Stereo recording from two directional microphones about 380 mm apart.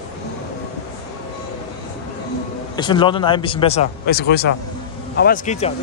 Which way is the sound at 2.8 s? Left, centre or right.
Centre.